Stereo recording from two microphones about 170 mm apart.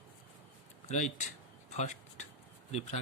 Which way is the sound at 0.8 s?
45° left (ahead or behind).